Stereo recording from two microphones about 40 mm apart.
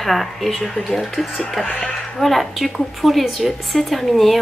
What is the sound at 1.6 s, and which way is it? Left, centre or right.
Speech, left.